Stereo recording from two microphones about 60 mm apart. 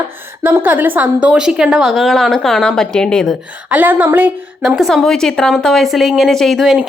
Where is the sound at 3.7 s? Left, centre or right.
Right.